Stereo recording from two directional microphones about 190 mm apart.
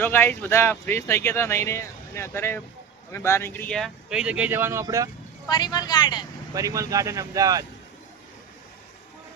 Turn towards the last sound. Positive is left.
turn(degrees=-20)  # may be behind; listen again after turning